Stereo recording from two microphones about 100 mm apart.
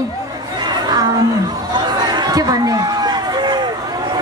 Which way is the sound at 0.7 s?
45° right (ahead or behind).